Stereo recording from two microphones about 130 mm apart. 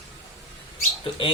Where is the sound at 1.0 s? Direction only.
40° left (ahead or behind).